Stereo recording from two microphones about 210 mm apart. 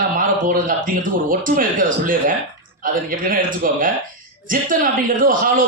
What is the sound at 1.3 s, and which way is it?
Speech, 40° right (ahead or behind).